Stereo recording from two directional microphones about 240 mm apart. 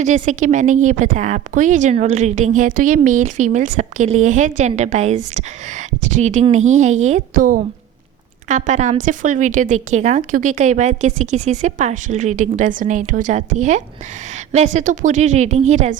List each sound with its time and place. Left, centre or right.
0.0 s a woman's voice: right